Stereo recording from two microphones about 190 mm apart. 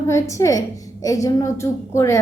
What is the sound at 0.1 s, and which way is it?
A woman's voice, 15° left (ahead or behind).